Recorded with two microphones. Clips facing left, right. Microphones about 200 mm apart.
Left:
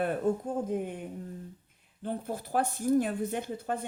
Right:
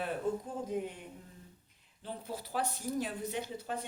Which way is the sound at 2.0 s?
50° left (ahead or behind).